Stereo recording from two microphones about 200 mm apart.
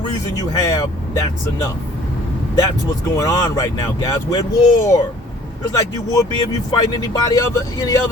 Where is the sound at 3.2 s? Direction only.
20° left (ahead or behind).